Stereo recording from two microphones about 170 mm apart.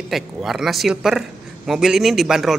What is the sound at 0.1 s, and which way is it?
Speech, centre (ahead or behind).